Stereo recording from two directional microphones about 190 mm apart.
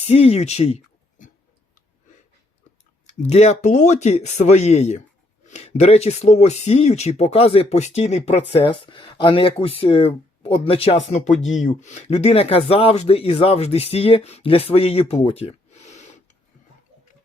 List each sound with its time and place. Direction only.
0.1 s speech: 35° left (ahead or behind)
3.1 s speech: 35° left (ahead or behind)